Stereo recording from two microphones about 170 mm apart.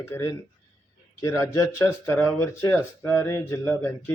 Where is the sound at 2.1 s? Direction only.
10° left (ahead or behind).